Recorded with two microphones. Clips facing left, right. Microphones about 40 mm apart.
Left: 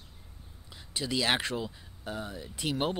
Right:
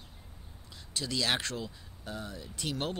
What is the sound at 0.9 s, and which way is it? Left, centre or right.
Speech, centre.